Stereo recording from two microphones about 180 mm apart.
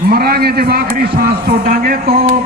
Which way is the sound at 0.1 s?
55° right (ahead or behind).